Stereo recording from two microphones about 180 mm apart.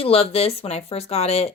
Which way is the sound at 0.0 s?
35° left (ahead or behind).